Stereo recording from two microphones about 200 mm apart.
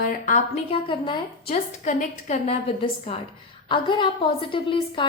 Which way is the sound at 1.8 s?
40° left (ahead or behind).